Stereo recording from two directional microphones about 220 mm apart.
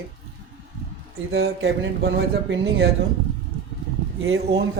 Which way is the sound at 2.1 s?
50° right (ahead or behind).